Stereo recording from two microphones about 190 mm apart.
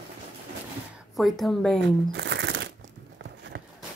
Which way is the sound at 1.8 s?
65° right (ahead or behind).